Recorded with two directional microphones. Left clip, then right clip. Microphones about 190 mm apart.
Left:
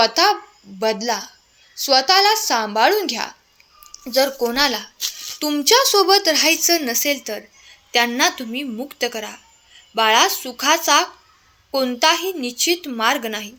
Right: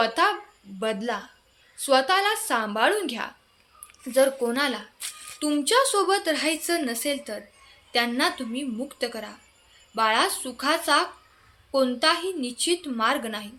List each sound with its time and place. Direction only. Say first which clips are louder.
0.0 s speech: left 7 dB; 25° left (ahead or behind)